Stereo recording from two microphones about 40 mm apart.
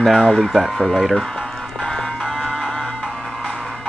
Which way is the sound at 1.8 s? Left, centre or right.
Centre.